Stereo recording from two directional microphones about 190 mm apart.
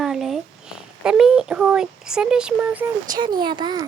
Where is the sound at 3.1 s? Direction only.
20° right (ahead or behind).